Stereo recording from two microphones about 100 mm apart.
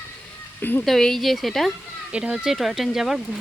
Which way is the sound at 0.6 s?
20° left (ahead or behind).